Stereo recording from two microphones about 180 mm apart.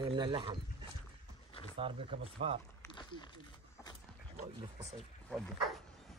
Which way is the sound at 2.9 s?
25° left (ahead or behind).